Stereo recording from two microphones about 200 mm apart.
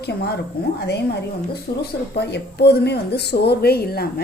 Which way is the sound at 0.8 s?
55° left (ahead or behind).